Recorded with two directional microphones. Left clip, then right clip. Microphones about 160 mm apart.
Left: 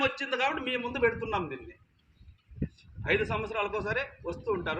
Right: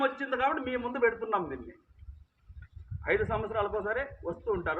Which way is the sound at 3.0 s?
20° left (ahead or behind).